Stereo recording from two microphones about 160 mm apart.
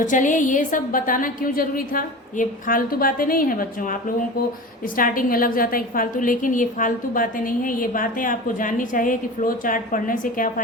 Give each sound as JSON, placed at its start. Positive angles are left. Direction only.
{"t": 0.0, "sound": "a woman's voice", "side_deg": 55}
{"t": 4.9, "sound": "a woman's voice", "side_deg": 60}